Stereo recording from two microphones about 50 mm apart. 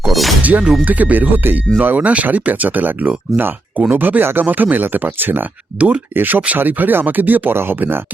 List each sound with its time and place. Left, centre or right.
0.0 s shatter: centre
0.4 s speech: right
7.5 s speech: right